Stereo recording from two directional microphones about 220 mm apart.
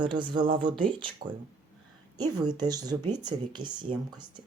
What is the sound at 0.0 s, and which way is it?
Speech, 20° right (ahead or behind).